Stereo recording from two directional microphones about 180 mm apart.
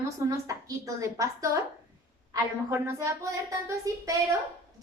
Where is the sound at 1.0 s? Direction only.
15° right (ahead or behind).